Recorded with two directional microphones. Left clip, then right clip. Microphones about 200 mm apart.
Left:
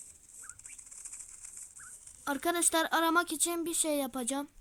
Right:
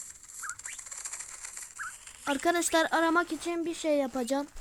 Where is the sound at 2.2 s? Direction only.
10° right (ahead or behind).